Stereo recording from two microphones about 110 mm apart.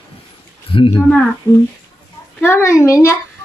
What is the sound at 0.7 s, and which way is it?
Speech, 50° left (ahead or behind).